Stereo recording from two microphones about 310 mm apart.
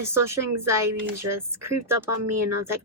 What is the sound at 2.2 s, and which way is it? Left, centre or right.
Speech, right.